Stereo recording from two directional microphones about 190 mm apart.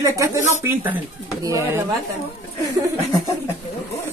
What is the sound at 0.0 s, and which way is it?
Speech, 15° right (ahead or behind).